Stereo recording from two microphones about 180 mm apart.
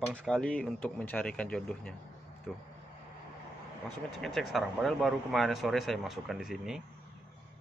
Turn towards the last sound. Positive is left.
turn(degrees=0)  # may be behind; listen again after turning